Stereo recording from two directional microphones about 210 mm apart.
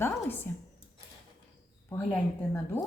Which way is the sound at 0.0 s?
10° left (ahead or behind).